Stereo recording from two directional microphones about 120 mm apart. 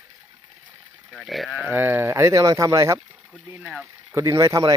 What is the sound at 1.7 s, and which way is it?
Speech, 15° right (ahead or behind).